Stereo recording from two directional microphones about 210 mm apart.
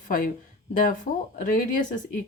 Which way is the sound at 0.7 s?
40° left (ahead or behind).